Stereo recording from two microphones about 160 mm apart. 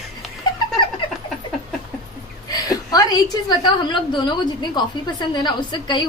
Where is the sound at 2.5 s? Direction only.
25° left (ahead or behind).